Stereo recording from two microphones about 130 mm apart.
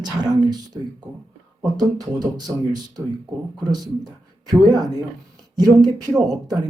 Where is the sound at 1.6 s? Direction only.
30° right (ahead or behind).